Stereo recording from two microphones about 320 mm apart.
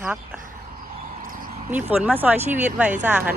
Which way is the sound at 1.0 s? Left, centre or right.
Right.